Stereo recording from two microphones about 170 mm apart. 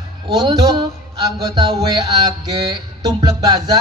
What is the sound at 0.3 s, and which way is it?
A man's voice, 25° right (ahead or behind).